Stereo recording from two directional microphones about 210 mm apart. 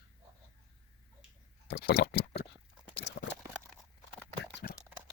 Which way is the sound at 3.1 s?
55° left (ahead or behind).